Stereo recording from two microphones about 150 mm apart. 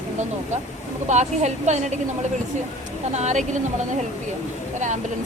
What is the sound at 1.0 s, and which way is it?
Speech, 50° right (ahead or behind).